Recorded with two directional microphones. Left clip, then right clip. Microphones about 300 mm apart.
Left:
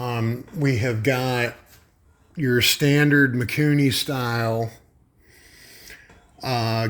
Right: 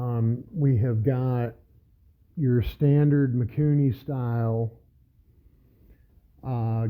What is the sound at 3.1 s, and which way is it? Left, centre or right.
Speech, centre.